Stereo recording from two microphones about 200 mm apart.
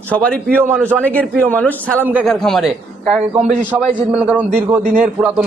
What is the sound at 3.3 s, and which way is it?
Speech, 35° right (ahead or behind).